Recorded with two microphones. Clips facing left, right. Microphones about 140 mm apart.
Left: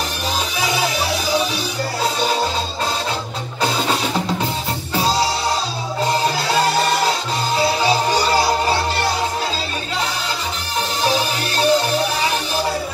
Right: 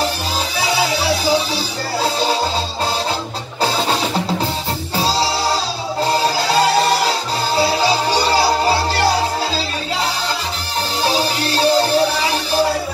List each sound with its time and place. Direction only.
4.9 s music: 30° right (ahead or behind)
11.1 s music: 35° right (ahead or behind)